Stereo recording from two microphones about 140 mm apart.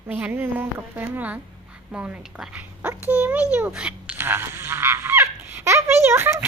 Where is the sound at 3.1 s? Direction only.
10° right (ahead or behind).